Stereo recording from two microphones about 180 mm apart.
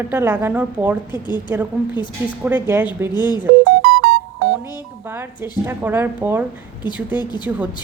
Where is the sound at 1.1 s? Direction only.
25° left (ahead or behind).